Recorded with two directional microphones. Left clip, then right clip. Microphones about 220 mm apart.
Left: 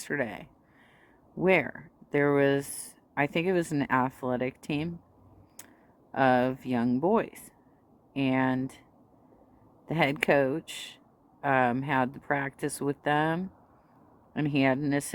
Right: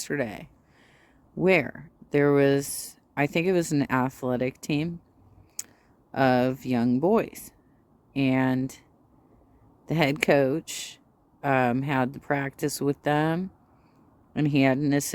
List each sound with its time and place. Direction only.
0.0 s speech: 40° right (ahead or behind)
9.8 s speech: 40° right (ahead or behind)